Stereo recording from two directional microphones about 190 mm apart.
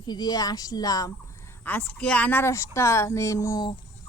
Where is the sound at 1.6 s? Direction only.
10° left (ahead or behind).